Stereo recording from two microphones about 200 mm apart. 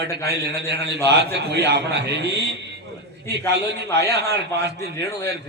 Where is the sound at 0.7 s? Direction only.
55° right (ahead or behind).